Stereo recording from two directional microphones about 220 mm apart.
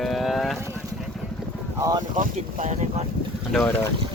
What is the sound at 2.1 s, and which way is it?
Speech, 35° right (ahead or behind).